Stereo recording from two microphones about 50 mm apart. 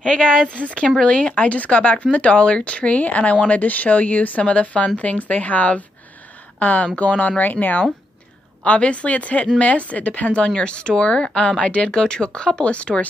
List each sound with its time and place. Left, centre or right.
0.0 s a woman's voice: centre; by 7.5 s left
8.6 s speech: left